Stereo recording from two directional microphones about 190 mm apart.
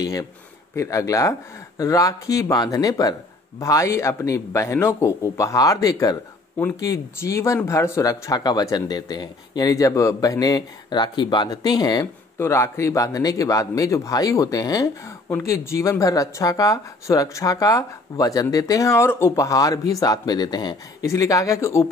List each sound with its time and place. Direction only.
0.7 s speech: 15° left (ahead or behind)